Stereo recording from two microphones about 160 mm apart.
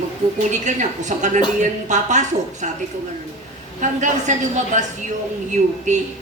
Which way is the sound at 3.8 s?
50° right (ahead or behind).